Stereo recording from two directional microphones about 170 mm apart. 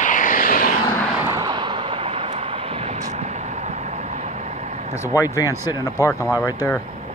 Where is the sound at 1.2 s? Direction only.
20° right (ahead or behind); by 4.7 s 40° right (ahead or behind).